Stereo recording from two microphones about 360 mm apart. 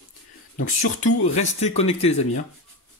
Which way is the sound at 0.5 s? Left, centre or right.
Left.